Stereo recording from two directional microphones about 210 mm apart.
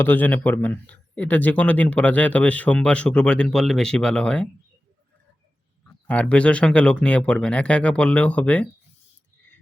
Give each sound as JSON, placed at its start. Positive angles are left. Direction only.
{"t": 0.0, "sound": "speech", "side_deg": 10}
{"t": 6.1, "sound": "speech", "side_deg": 5}